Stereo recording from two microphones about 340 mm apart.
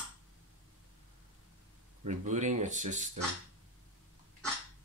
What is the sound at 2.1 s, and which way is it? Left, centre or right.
Speech, right.